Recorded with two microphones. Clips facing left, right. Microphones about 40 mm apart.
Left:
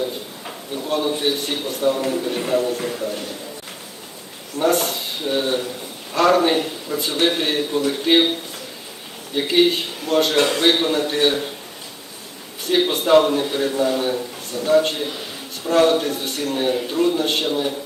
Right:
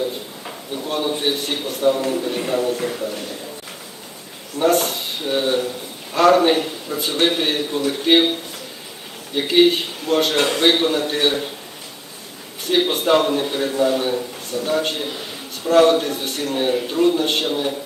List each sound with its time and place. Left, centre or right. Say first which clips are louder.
0.8 s a sound: left 1 dB; centre
1.1 s a man's voice: even; right
1.5 s a man's voice: right 2 dB; centre
4.5 s a man's voice: right 1 dB; centre
9.3 s a man's voice: right 2 dB; centre
10.8 s a man's voice: even; centre
12.7 s a man's voice: left 2 dB; centre